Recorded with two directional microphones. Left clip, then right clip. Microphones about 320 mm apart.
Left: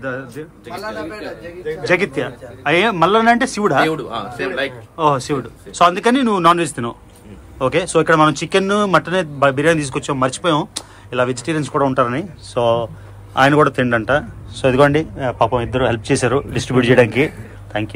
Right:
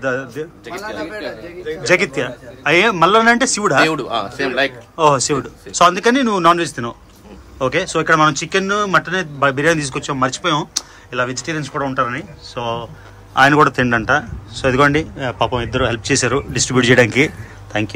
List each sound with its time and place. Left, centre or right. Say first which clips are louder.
0.0 s a man's voice: right 5 dB; centre
1.9 s speech: right 2 dB; centre
3.8 s a man's voice: right 2 dB; right
4.9 s a man's voice: right 2 dB; centre